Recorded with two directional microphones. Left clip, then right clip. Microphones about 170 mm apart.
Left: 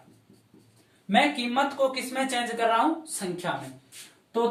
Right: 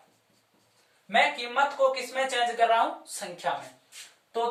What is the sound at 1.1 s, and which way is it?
A woman's voice, centre (ahead or behind).